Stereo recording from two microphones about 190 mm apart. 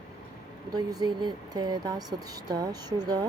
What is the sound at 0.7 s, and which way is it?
Speech, 20° right (ahead or behind).